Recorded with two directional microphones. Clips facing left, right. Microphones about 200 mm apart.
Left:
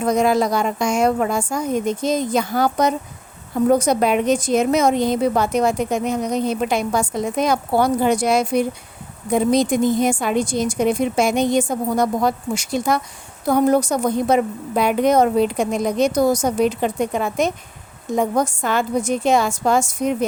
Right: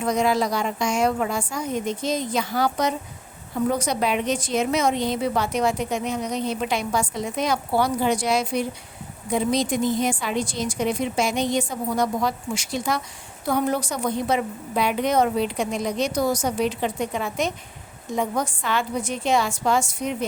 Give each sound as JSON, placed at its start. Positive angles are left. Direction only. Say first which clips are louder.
{"t": 0.0, "sound": "a woman's voice", "louder": "left 4 dB", "side_deg": 50}